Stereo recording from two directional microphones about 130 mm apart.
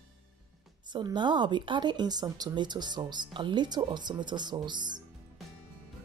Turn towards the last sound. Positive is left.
turn(degrees=-35)  # may be behind; listen again after turning